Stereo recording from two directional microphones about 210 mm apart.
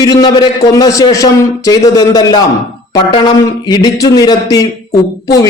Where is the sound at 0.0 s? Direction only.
20° left (ahead or behind).